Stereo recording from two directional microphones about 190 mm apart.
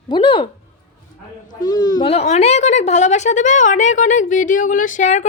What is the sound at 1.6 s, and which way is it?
Speech, 20° left (ahead or behind).